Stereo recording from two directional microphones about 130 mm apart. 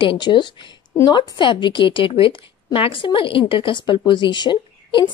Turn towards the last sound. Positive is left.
turn(degrees=35)  # may be behind; listen again after turning